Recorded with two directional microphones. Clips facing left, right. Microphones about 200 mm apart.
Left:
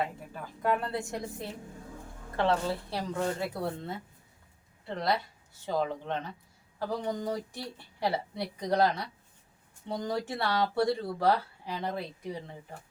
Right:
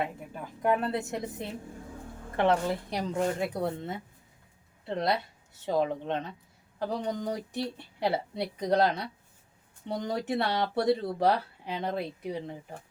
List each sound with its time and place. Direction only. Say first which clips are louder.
0.6 s speech: right 3 dB; 20° right (ahead or behind)
5.6 s speech: right 3 dB; 20° right (ahead or behind)